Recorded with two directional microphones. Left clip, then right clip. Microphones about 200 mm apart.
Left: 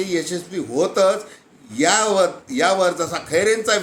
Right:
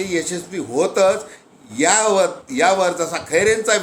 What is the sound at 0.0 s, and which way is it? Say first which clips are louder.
A man's voice: right 1 dB; 5° left (ahead or behind).